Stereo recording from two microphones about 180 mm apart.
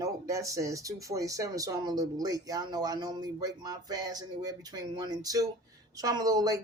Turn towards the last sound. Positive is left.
turn(degrees=-20)  # may be behind; listen again after turning